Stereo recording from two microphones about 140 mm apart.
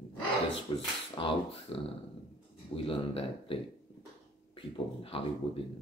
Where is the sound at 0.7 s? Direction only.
40° left (ahead or behind).